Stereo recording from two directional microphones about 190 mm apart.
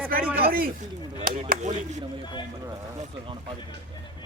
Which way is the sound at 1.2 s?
45° right (ahead or behind).